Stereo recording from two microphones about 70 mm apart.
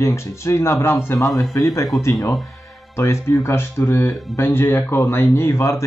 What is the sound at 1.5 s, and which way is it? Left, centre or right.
A man's voice, left.